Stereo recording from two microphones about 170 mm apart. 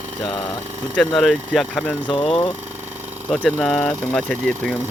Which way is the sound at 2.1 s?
30° left (ahead or behind).